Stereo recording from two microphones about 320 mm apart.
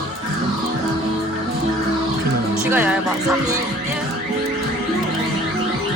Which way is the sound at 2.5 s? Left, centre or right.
Centre.